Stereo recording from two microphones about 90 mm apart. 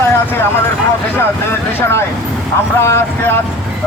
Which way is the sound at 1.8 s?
30° left (ahead or behind).